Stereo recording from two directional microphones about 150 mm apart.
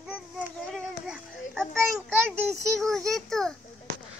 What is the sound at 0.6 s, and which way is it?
Child singing, centre (ahead or behind).